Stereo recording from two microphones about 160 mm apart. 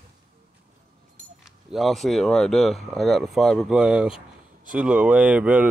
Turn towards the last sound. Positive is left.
turn(degrees=-10)  # may be behind; listen again after turning